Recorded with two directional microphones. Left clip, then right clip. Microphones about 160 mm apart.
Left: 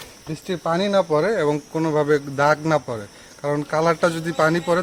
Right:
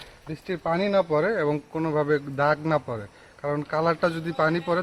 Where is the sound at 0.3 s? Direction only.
Centre (ahead or behind).